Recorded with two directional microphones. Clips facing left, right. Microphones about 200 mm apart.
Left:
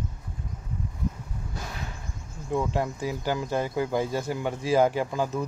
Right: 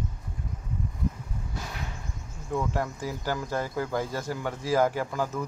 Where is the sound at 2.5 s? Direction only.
20° left (ahead or behind).